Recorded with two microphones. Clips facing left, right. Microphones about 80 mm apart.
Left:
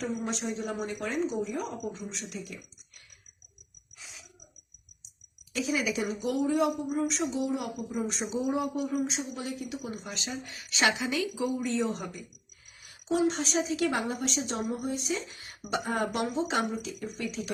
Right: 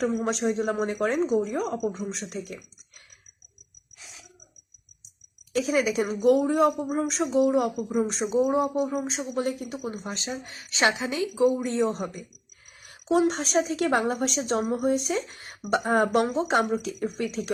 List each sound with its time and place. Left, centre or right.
0.0 s a woman's voice: right
5.5 s a woman's voice: right
7.9 s a woman's voice: right
8.5 s speech: right
8.9 s speech: right
11.4 s speech: right
12.8 s a woman's voice: right